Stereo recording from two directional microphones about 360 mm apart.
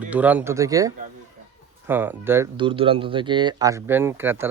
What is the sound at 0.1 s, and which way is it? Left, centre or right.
Speech, centre.